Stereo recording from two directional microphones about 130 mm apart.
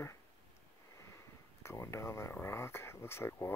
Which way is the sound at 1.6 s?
20° left (ahead or behind).